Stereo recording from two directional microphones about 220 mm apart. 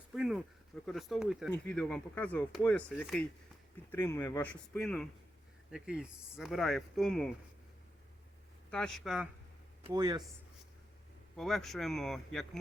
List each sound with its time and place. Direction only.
0.1 s a sound: centre (ahead or behind)
0.9 s speech: centre (ahead or behind)
8.7 s speech: 5° left (ahead or behind)
9.8 s speech: 20° right (ahead or behind)
11.3 s speech: centre (ahead or behind)